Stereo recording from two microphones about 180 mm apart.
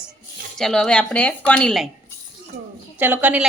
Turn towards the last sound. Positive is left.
turn(degrees=-10)  # may be behind; listen again after turning